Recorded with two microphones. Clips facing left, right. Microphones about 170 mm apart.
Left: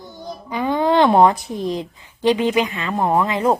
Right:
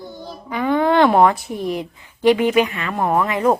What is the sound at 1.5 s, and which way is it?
Speech, 15° right (ahead or behind).